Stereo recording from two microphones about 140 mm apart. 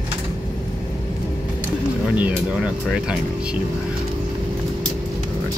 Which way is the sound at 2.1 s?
10° right (ahead or behind).